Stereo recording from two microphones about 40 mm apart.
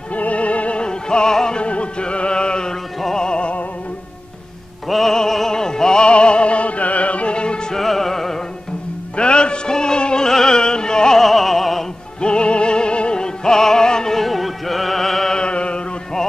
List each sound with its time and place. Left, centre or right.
0.1 s music: left; by 1.6 s centre
1.6 s music: left; by 3.3 s centre
3.3 s music: left
4.8 s music: centre; by 7.6 s left
7.7 s music: centre
9.1 s music: left
11.1 s opera: centre
12.2 s music: left
14.1 s music: centre
15.3 s chant: left